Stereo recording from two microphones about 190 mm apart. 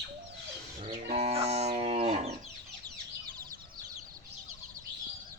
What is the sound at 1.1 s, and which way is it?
Livestock, 30° right (ahead or behind).